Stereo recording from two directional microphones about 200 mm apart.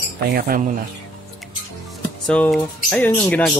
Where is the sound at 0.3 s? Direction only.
45° right (ahead or behind).